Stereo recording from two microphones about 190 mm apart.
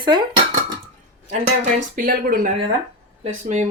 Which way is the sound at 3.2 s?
35° right (ahead or behind).